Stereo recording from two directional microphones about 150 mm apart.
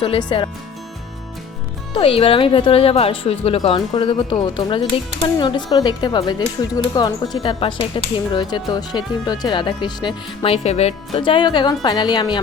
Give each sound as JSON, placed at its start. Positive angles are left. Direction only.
{"t": 0.0, "sound": "speech", "side_deg": 35}
{"t": 1.9, "sound": "speech", "side_deg": 40}